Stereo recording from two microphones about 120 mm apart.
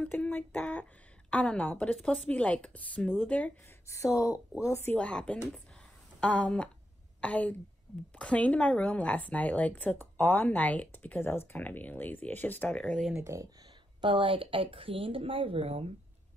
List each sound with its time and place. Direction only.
0.0 s a sound: 10° left (ahead or behind)
1.3 s a woman's voice: 10° left (ahead or behind)
3.8 s a woman's voice: 25° left (ahead or behind)
4.9 s a woman's voice: 10° left (ahead or behind)
13.2 s speech: 25° right (ahead or behind)
14.0 s speech: 45° right (ahead or behind)